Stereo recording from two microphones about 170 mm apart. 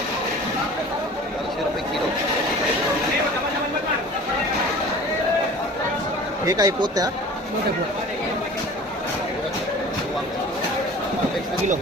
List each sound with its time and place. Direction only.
6.4 s speech: 20° right (ahead or behind)